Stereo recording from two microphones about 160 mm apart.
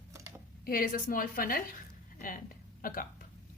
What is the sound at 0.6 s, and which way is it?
Speech, 65° left (ahead or behind).